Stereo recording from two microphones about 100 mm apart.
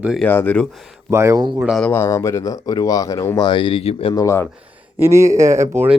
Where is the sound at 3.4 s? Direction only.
55° left (ahead or behind); by 4.1 s 80° left.